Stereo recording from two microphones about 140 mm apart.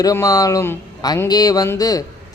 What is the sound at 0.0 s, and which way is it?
A man's voice, 25° left (ahead or behind).